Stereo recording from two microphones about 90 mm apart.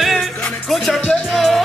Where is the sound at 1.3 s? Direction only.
Centre (ahead or behind).